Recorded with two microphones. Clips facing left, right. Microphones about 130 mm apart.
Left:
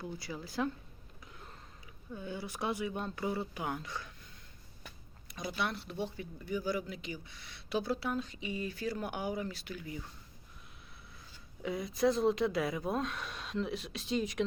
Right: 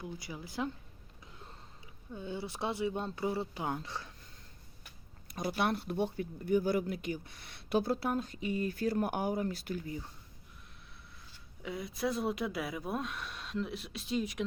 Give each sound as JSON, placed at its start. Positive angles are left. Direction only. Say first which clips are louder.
{"t": 0.0, "sound": "speech", "louder": "left 1 dB", "side_deg": -15}
{"t": 2.1, "sound": "speech", "louder": "right 1 dB", "side_deg": -25}
{"t": 5.3, "sound": "speech", "louder": "right 4 dB", "side_deg": -50}
{"t": 11.6, "sound": "speech", "louder": "left 5 dB", "side_deg": 0}